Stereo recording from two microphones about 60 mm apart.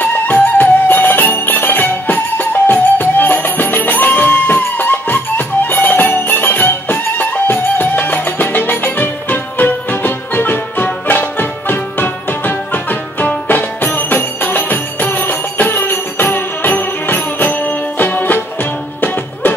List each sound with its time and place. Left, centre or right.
0.0 s music: left